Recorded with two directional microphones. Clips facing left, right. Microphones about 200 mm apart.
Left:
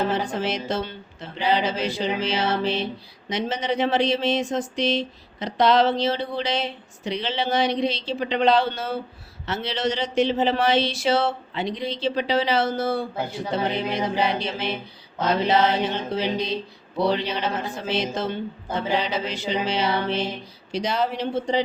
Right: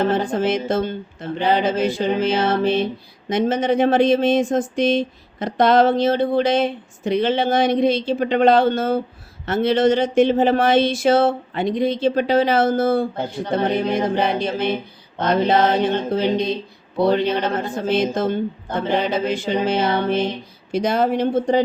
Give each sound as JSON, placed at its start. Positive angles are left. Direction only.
{"t": 0.1, "sound": "speech", "side_deg": -50}